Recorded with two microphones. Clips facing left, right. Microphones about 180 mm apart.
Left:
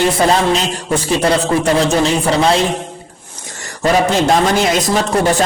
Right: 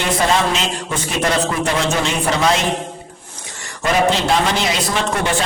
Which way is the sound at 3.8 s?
45° left (ahead or behind).